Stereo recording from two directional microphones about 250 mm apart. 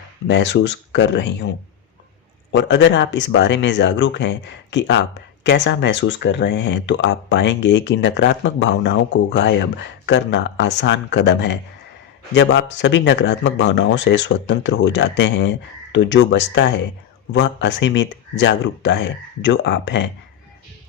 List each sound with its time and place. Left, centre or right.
0.3 s speech: left